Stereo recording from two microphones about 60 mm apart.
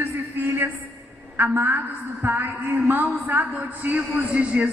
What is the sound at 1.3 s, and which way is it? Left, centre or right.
A woman's voice, right.